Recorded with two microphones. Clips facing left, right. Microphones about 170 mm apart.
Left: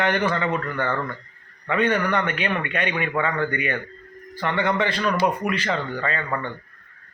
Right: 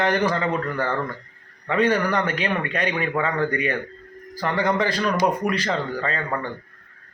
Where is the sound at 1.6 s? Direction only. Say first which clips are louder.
Right 1 dB; 35° right (ahead or behind).